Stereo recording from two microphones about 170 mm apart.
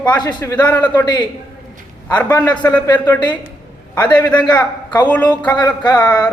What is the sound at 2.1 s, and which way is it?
Speech, 10° left (ahead or behind).